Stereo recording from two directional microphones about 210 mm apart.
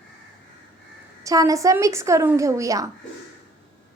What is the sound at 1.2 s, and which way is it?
A woman's voice, 15° right (ahead or behind).